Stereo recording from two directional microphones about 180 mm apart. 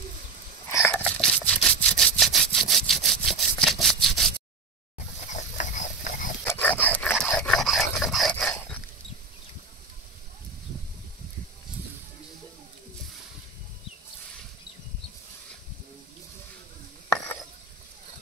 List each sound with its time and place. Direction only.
0.7 s sawing: 15° left (ahead or behind)
4.9 s pig: 40° left (ahead or behind)
6.4 s dog: 10° left (ahead or behind)